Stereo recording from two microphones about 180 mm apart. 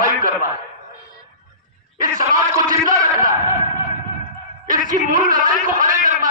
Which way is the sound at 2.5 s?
20° right (ahead or behind).